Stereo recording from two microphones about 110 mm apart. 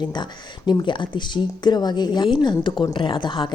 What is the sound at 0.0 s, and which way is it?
Speech, 40° left (ahead or behind).